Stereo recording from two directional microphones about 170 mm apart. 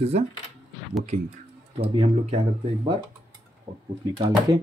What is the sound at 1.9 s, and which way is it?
Speech, 35° right (ahead or behind).